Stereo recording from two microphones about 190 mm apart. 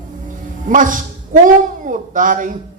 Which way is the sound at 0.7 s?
45° right (ahead or behind).